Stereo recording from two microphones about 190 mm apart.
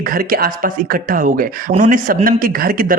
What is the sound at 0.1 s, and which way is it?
A man's voice, 50° right (ahead or behind).